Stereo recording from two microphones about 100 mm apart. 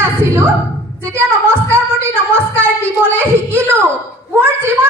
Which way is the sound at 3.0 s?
20° right (ahead or behind).